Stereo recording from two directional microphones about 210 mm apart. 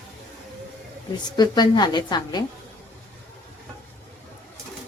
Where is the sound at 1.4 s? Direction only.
20° left (ahead or behind).